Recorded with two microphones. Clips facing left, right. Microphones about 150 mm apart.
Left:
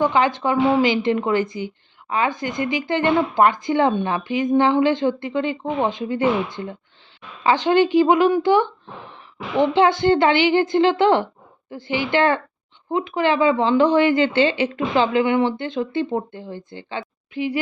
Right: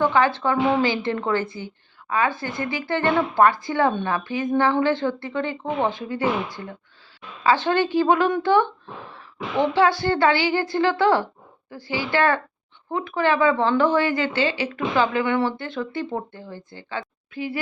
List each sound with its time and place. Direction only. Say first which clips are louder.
0.0 s a woman's voice: left 1 dB; 15° left (ahead or behind)